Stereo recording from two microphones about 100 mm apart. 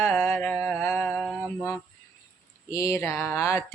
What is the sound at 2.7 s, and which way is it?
Mantra, 30° left (ahead or behind).